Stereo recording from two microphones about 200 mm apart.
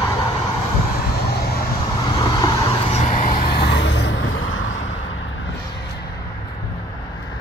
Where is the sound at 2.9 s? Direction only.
40° left (ahead or behind); by 4.1 s 60° left (ahead or behind).